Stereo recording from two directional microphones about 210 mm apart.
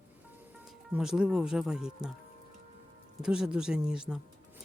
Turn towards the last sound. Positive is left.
turn(degrees=-5)  # may be behind; listen again after turning